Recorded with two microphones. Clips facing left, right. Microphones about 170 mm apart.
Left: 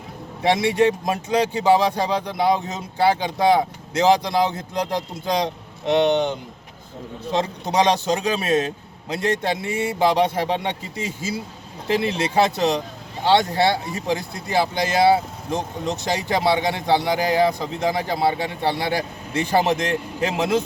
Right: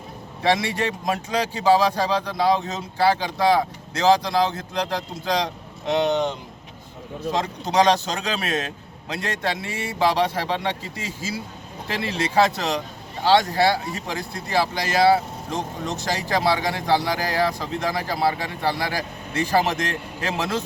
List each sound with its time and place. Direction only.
0.4 s speech: 20° left (ahead or behind)
7.3 s speech: 25° left (ahead or behind)